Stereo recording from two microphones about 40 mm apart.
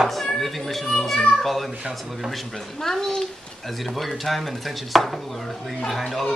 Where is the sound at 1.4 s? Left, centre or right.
Centre.